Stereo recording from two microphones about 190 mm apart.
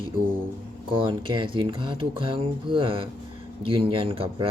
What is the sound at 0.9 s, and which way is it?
Speech, 25° right (ahead or behind).